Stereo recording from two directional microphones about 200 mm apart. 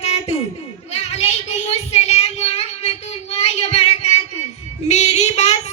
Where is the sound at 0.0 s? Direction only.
35° left (ahead or behind).